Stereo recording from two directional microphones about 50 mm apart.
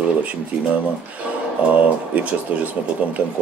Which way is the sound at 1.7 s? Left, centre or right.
Right.